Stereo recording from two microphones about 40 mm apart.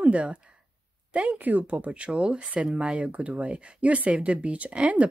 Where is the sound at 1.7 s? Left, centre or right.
Right.